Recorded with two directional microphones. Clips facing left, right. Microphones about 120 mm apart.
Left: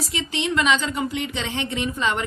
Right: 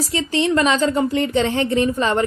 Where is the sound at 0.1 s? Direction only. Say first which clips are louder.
Right 7 dB; 35° right (ahead or behind).